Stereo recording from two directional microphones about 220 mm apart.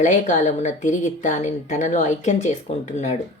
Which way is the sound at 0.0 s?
35° left (ahead or behind).